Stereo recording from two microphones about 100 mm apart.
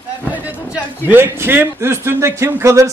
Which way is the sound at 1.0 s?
20° right (ahead or behind).